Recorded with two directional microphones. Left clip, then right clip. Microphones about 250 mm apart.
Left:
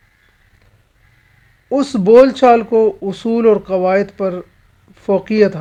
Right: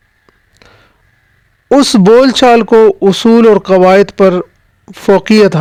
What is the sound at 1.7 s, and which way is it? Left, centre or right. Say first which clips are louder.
Speech: right 6 dB; right.